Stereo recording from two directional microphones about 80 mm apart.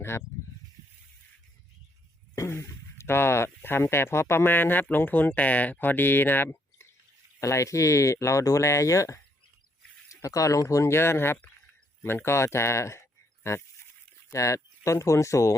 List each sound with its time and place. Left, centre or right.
0.0 s speech: left
2.3 s speech: left
10.2 s speech: left